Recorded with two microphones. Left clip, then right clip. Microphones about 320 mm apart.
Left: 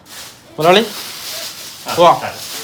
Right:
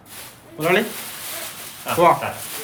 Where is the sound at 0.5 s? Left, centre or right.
Centre.